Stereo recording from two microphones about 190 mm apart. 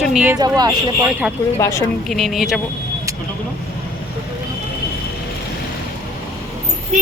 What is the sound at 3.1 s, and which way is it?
Vehicle, 15° right (ahead or behind).